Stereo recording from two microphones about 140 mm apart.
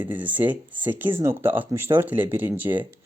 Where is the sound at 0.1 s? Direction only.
15° right (ahead or behind).